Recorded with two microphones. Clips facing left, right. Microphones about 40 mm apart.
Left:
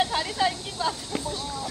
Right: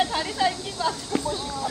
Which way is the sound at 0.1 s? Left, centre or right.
Centre.